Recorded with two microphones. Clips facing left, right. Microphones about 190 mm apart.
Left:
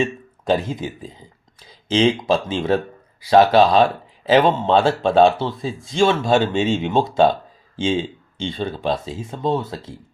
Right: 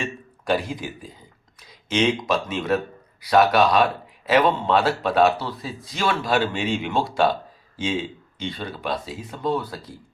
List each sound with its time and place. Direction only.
0.0 s speech: 20° left (ahead or behind)